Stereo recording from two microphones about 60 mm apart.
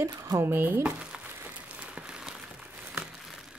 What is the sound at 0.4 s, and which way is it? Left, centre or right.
Speech, right.